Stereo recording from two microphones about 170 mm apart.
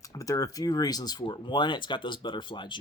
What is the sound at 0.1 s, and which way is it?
Speech, 20° left (ahead or behind).